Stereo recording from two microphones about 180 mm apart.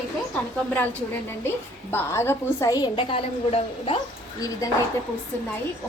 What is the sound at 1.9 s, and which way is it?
A woman's voice, 15° left (ahead or behind).